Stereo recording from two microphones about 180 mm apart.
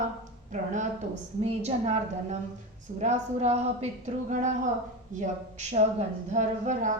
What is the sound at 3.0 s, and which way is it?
Speech, 40° right (ahead or behind).